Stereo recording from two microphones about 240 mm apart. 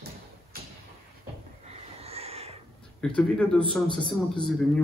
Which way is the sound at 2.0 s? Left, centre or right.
Right.